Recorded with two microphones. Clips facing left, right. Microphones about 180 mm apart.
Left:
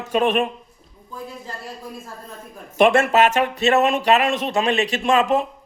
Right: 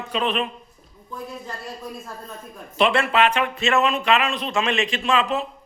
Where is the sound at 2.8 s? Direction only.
45° left (ahead or behind).